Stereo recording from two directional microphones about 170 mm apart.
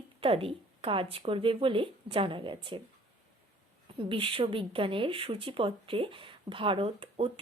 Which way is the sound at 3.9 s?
30° right (ahead or behind).